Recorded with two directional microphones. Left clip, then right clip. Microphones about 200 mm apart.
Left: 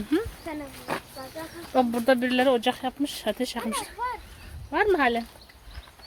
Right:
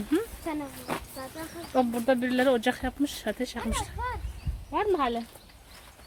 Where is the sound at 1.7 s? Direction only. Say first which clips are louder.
Left 3 dB; 10° left (ahead or behind).